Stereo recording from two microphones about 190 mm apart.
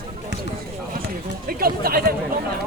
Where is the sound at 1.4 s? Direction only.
50° right (ahead or behind).